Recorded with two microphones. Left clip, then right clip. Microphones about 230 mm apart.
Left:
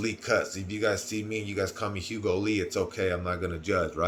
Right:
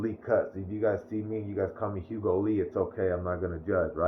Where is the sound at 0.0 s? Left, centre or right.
Left.